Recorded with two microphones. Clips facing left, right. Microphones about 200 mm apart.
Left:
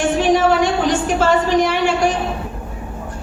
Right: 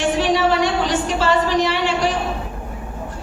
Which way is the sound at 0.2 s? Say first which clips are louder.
Left 5 dB; 50° left (ahead or behind).